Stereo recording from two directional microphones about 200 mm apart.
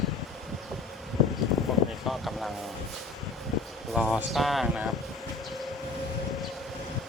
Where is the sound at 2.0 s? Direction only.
Centre (ahead or behind).